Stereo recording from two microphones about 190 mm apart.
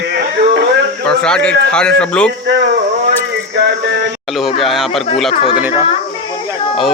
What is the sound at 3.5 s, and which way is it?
Music, 65° right (ahead or behind).